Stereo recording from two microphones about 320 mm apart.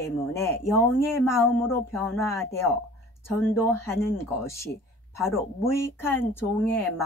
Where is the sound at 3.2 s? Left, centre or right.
Centre.